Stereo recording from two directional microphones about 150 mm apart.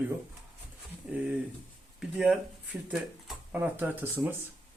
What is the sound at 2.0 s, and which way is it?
Speech, 5° right (ahead or behind).